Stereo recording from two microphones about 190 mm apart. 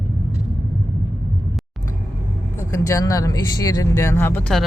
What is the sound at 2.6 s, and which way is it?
Speech, 15° left (ahead or behind).